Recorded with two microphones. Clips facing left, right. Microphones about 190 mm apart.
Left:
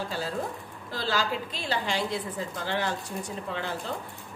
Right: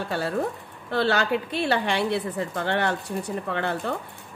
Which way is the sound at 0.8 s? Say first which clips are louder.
Right 6 dB; 65° right (ahead or behind).